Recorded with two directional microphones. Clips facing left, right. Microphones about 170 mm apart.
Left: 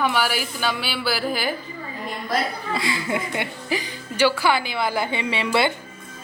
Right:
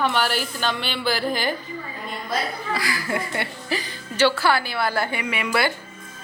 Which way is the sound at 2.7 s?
25° left (ahead or behind).